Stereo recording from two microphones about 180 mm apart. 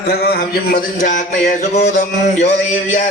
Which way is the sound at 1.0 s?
45° left (ahead or behind).